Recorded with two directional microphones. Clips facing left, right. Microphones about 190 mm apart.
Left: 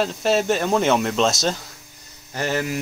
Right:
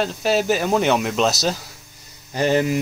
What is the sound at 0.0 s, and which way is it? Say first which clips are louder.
Speech: even; centre (ahead or behind).